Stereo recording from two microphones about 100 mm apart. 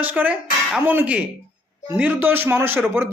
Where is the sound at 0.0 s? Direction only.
15° right (ahead or behind).